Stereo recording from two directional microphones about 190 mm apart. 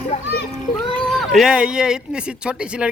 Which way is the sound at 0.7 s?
20° left (ahead or behind).